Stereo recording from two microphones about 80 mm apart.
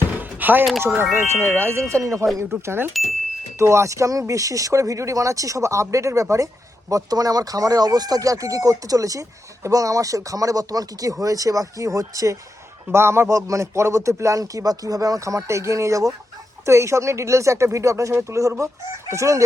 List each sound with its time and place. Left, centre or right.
0.1 s a sound: right
0.8 s a man's voice: right
2.6 s a man's voice: right
6.9 s speech: right
12.9 s a man's voice: right